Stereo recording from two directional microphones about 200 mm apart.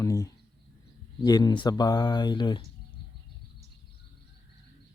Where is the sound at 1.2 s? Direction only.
20° left (ahead or behind).